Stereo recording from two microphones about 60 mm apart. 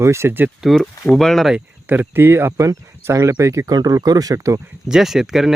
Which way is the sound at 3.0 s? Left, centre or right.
Right.